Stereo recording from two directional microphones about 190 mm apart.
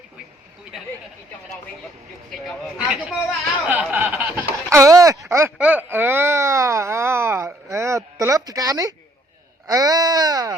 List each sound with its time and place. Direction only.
2.3 s speech: centre (ahead or behind)
3.7 s snicker: 10° right (ahead or behind)
5.3 s a sound: 10° right (ahead or behind)